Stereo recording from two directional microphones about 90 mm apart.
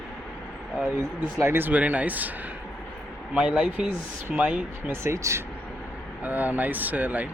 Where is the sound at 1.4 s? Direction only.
25° right (ahead or behind).